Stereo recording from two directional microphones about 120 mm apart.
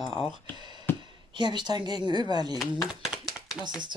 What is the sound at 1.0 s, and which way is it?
A woman's voice, 40° right (ahead or behind).